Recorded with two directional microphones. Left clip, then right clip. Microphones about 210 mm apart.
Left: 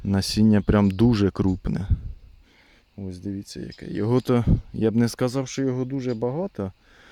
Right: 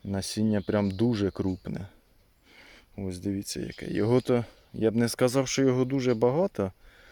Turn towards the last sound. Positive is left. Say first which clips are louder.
# right 3 dB
turn(degrees=0)  # may be behind; listen again after turning